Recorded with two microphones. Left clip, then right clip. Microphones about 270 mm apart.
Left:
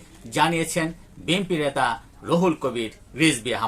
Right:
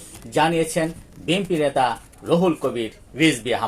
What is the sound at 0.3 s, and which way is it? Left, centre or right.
Speech, centre.